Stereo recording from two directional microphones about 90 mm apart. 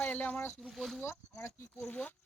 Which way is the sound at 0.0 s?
20° left (ahead or behind).